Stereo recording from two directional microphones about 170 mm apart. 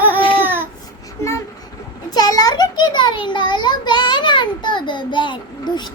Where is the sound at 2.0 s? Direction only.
25° left (ahead or behind).